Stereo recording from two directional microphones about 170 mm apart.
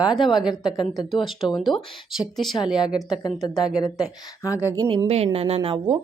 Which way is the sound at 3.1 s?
25° left (ahead or behind).